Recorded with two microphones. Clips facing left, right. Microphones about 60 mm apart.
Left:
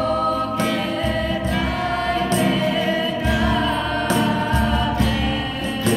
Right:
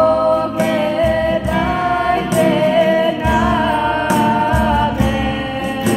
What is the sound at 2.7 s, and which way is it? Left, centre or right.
Music, centre.